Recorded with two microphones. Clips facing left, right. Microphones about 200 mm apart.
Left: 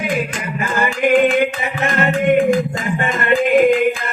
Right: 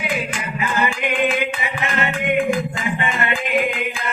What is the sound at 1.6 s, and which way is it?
Music, 40° left (ahead or behind).